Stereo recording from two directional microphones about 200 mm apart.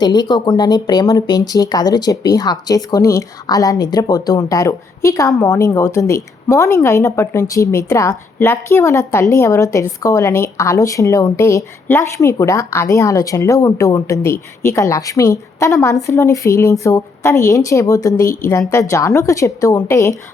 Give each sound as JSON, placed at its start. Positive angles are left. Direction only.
{"t": 0.0, "sound": "speech", "side_deg": 20}